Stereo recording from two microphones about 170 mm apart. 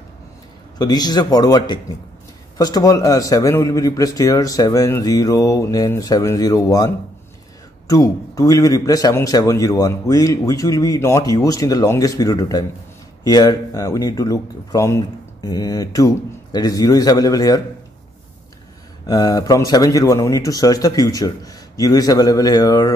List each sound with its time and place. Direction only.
0.7 s a man's voice: 25° left (ahead or behind)
7.9 s a man's voice: 20° left (ahead or behind)
19.0 s a man's voice: 20° left (ahead or behind)